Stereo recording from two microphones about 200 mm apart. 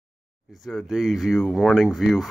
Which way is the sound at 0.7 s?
Centre (ahead or behind).